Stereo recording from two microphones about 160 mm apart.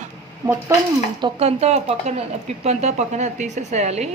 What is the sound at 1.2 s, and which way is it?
Speech, 30° right (ahead or behind).